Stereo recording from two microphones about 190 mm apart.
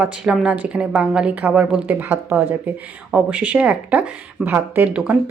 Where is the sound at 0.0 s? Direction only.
5° right (ahead or behind).